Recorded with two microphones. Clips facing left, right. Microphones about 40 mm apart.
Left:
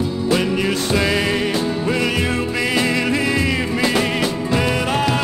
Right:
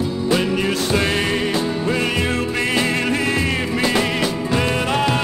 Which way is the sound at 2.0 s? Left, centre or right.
Right.